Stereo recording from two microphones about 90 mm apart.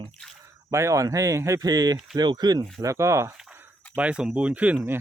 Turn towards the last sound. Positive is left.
turn(degrees=-15)  # may be behind; listen again after turning